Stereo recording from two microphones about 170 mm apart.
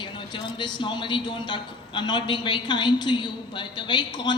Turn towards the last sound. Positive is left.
turn(degrees=25)  # may be behind; listen again after turning